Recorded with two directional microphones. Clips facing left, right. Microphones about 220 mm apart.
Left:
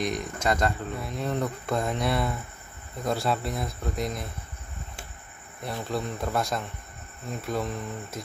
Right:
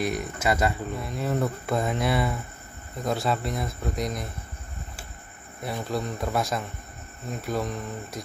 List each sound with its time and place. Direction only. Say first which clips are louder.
0.0 s speech: right 1 dB; 5° right (ahead or behind)
5.6 s speech: right 1 dB; centre (ahead or behind)